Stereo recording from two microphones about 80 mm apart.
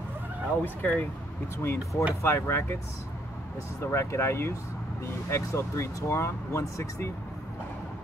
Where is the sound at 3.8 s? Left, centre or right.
Left.